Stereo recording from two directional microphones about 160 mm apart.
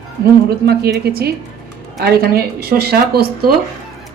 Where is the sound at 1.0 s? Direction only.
80° right.